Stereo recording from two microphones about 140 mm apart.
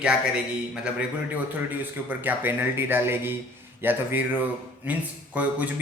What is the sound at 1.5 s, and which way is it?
Speech, 15° right (ahead or behind).